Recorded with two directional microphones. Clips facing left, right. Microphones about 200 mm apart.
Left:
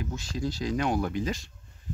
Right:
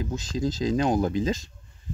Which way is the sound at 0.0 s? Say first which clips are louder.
Right 4 dB; 20° right (ahead or behind).